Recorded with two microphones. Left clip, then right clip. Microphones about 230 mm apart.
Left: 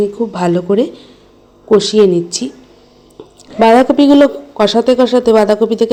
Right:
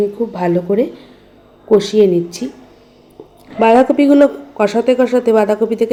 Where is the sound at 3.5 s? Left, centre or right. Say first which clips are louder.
Left 2 dB; left.